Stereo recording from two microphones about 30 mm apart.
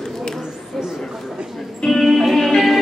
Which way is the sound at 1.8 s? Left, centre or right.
Centre.